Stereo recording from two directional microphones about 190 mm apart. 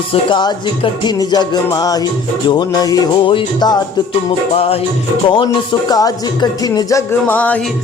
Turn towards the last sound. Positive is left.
turn(degrees=10)  # may be behind; listen again after turning